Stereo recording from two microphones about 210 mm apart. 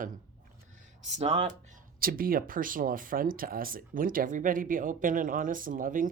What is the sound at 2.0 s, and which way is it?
Speech, 45° right (ahead or behind).